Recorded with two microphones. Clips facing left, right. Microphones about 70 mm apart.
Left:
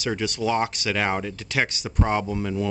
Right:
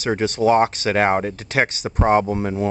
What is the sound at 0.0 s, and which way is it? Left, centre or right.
Speech, right.